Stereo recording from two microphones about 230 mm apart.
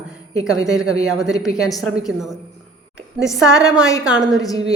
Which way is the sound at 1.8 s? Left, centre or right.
Centre.